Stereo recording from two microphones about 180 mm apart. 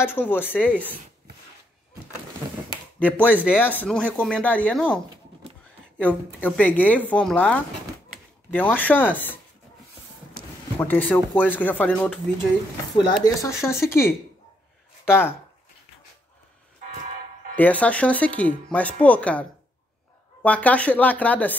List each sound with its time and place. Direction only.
0.1 s speech: 10° left (ahead or behind)
0.7 s speech: 10° right (ahead or behind)
3.2 s speech: 10° right (ahead or behind)
3.4 s speech: 10° left (ahead or behind)
10.8 s speech: 10° left (ahead or behind)
12.9 s speech: 20° left (ahead or behind)
17.6 s speech: 10° left (ahead or behind)
20.4 s speech: 5° left (ahead or behind)